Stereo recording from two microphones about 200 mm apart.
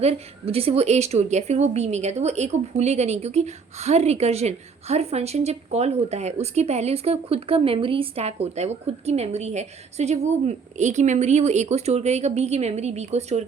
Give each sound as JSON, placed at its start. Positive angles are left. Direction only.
{"t": 0.0, "sound": "a woman's voice", "side_deg": -30}